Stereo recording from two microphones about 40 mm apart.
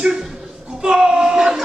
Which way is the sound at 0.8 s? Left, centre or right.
Centre.